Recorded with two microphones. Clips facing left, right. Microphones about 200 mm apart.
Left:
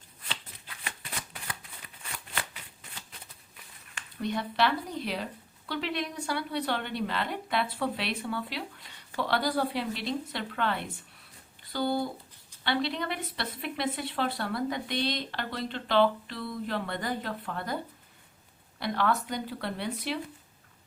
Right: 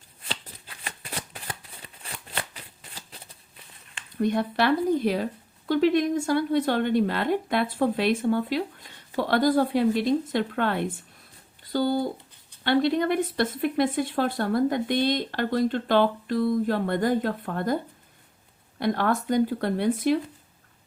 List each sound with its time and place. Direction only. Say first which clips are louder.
0.9 s shuffling cards: right 4 dB; 35° right (ahead or behind)
4.2 s speech: right 5 dB; 50° right (ahead or behind)
18.8 s speech: right 4 dB; 50° right (ahead or behind)